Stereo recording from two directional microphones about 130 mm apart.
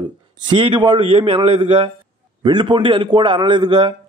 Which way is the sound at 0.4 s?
40° right (ahead or behind).